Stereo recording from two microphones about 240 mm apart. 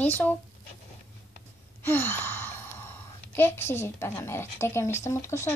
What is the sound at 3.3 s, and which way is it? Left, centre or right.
Speech, centre.